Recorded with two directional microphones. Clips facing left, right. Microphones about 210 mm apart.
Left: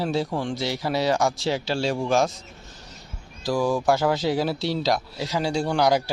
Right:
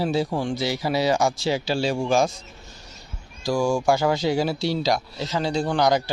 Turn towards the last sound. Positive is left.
turn(degrees=5)  # may be behind; listen again after turning